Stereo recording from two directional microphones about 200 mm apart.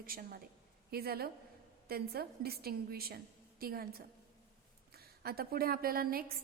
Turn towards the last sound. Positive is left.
turn(degrees=-45)  # may be behind; listen again after turning